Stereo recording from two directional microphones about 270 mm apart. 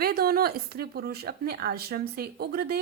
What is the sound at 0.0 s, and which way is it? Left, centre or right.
A woman's voice, right.